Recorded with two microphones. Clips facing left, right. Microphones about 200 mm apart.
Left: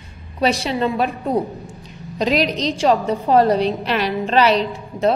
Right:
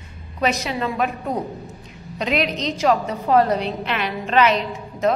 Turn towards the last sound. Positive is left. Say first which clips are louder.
# left 2 dB
turn(degrees=30)  # may be behind; listen again after turning